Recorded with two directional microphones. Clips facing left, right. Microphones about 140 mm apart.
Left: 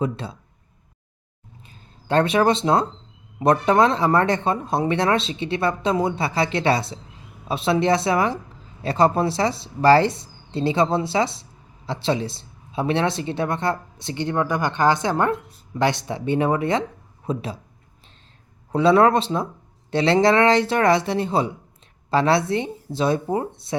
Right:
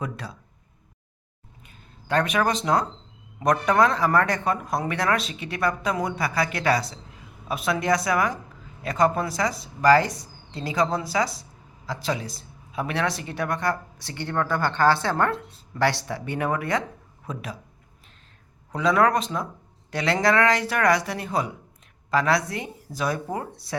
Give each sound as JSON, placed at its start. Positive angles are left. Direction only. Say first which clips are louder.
{"t": 0.0, "sound": "speech", "louder": "left 7 dB", "side_deg": 25}
{"t": 1.6, "sound": "a sound", "louder": "left 5 dB", "side_deg": 30}
{"t": 3.4, "sound": "speech", "louder": "left 3 dB", "side_deg": 25}
{"t": 18.7, "sound": "speech", "louder": "left 5 dB", "side_deg": 30}